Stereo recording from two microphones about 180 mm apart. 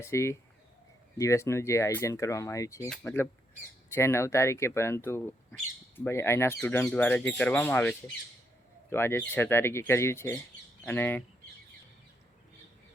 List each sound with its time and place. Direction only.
0.0 s speech: 15° left (ahead or behind)